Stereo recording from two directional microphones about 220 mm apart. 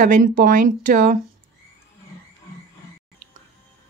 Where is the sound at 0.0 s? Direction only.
35° right (ahead or behind).